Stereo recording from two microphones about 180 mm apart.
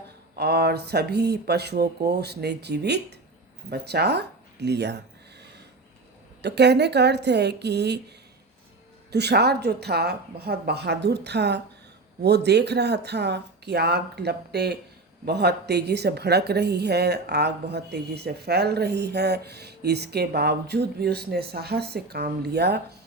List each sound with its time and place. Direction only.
0.3 s a woman's voice: 65° right (ahead or behind)
6.4 s speech: 70° right (ahead or behind)
9.1 s a woman's voice: 65° right (ahead or behind)